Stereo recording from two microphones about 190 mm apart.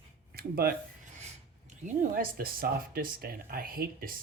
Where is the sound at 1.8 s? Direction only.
50° right (ahead or behind).